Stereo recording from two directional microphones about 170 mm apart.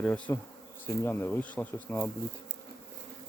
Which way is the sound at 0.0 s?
10° left (ahead or behind).